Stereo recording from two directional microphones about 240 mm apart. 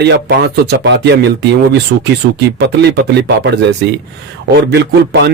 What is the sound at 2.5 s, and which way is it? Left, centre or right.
Speech, right.